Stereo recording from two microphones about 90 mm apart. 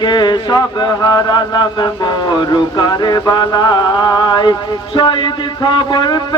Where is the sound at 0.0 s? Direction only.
55° left (ahead or behind).